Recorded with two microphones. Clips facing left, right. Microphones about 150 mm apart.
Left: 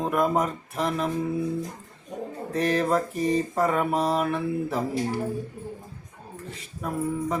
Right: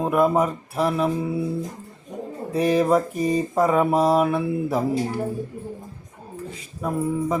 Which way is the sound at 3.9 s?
40° right (ahead or behind).